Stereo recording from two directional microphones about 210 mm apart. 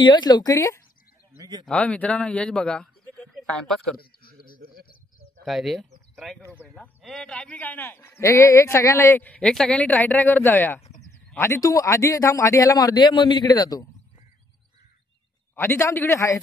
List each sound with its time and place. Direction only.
0.0 s speech: 20° left (ahead or behind)
1.4 s speech: 20° right (ahead or behind)
1.7 s a man's voice: 5° left (ahead or behind)
5.4 s speech: centre (ahead or behind)
6.4 s speech: 15° right (ahead or behind)
6.7 s speech: centre (ahead or behind); by 13.8 s 15° left (ahead or behind)
15.5 s speech: 10° left (ahead or behind)